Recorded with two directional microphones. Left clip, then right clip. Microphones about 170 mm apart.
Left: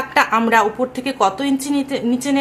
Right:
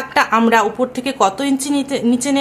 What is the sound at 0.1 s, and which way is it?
Speech, 15° right (ahead or behind).